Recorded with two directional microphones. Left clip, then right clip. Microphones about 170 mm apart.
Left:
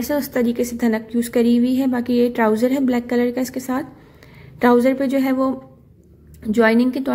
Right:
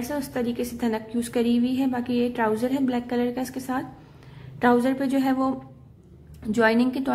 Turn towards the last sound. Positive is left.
turn(degrees=15)  # may be behind; listen again after turning